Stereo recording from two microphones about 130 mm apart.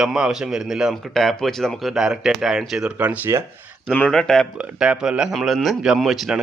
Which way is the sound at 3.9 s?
5° left (ahead or behind).